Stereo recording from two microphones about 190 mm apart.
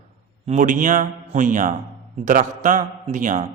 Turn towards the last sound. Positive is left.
turn(degrees=-40)  # may be behind; listen again after turning